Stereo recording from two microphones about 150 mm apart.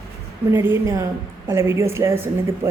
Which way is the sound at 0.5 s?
15° right (ahead or behind).